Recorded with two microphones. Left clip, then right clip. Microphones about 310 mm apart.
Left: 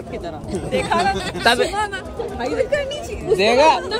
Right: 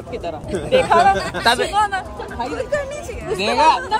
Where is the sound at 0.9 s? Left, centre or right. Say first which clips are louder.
Right 4 dB; centre.